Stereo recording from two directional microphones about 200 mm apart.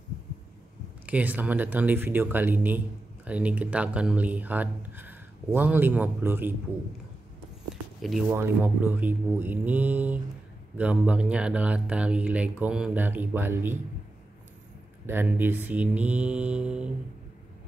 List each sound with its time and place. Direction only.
1.0 s speech: 5° right (ahead or behind)
8.3 s speech: 10° right (ahead or behind)
15.0 s speech: 10° right (ahead or behind)